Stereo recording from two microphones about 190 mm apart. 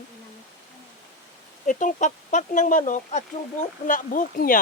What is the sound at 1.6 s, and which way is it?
Speech, 40° left (ahead or behind).